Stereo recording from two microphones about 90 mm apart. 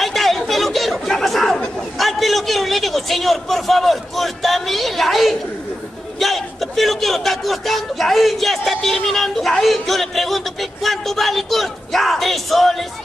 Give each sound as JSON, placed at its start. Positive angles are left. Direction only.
{"t": 0.0, "sound": "chatter", "side_deg": 0}
{"t": 2.0, "sound": "a man's voice", "side_deg": 0}